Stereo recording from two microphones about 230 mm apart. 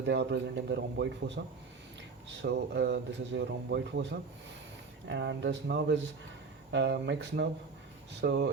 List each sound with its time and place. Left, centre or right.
0.0 s speech: right
2.4 s speech: right
5.0 s speech: right